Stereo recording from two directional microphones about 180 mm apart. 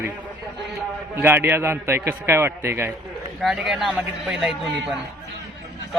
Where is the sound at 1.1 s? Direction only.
15° right (ahead or behind).